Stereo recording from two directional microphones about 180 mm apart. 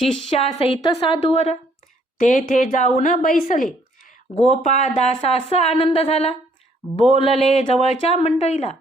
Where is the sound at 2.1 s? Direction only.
45° left (ahead or behind).